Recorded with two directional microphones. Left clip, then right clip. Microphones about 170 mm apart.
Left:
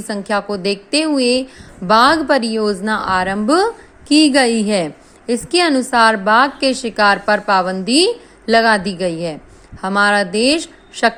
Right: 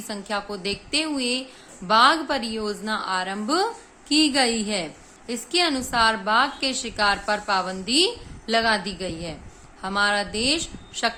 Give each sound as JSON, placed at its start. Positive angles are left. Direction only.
{"t": 0.1, "sound": "a woman's voice", "side_deg": 40}